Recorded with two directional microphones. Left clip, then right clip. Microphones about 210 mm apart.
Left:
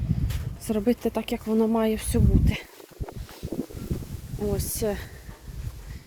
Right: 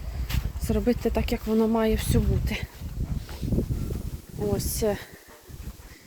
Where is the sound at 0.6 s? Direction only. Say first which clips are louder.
Even; 15° left (ahead or behind).